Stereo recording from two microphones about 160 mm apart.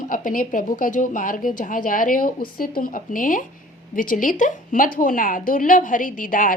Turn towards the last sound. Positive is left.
turn(degrees=55)  # may be behind; listen again after turning